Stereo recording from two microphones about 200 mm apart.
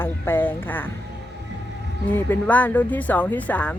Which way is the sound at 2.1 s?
10° left (ahead or behind).